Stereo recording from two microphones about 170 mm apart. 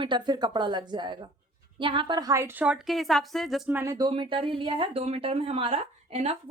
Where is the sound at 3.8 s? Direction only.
20° right (ahead or behind); by 6.3 s 40° right (ahead or behind).